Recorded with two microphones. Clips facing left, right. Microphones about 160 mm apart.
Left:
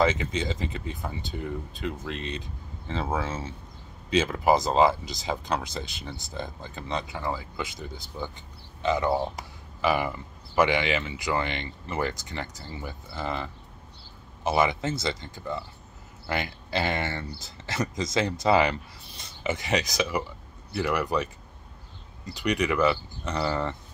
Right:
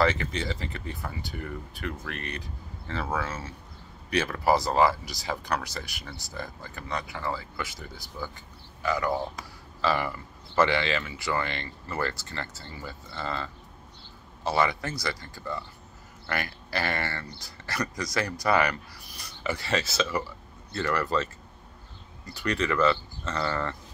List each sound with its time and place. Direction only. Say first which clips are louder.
0.0 s speech: left 1 dB; 20° left (ahead or behind)